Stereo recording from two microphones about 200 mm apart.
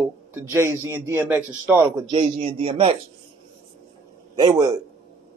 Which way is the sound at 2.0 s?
25° right (ahead or behind).